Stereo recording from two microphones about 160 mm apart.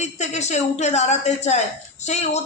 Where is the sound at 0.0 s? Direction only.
45° left (ahead or behind).